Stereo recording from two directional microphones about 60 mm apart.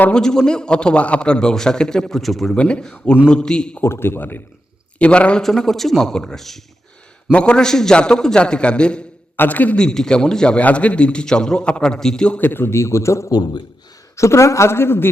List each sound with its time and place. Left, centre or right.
0.1 s a man's voice: centre
2.6 s a man's voice: centre
4.0 s a man's voice: left
4.9 s speech: left
5.4 s a man's voice: centre
7.3 s a man's voice: centre
9.3 s a man's voice: left
9.7 s a man's voice: centre
12.4 s speech: left